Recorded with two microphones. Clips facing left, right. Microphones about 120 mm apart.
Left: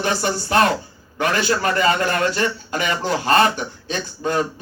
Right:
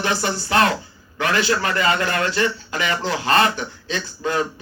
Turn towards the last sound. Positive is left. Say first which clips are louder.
# left 1 dB
turn(degrees=40)  # may be behind; listen again after turning